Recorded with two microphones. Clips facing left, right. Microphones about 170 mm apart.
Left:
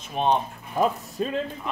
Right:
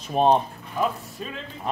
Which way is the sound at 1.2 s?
40° left (ahead or behind).